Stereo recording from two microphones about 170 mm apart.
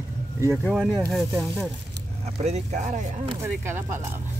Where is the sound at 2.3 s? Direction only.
40° right (ahead or behind).